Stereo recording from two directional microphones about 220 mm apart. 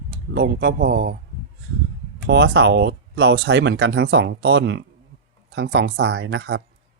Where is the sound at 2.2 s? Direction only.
50° right (ahead or behind).